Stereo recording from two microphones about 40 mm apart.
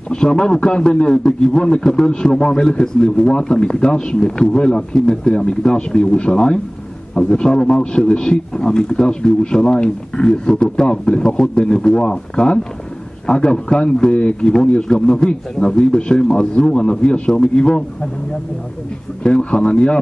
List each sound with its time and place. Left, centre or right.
0.1 s a man's voice: centre
19.2 s a man's voice: left